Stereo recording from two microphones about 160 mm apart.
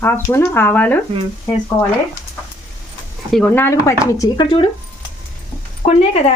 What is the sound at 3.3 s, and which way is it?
Speech, 10° left (ahead or behind).